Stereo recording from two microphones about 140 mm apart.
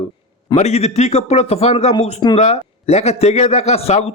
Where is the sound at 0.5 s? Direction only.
50° left (ahead or behind).